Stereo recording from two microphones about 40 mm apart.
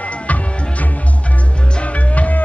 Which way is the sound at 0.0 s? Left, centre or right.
Left.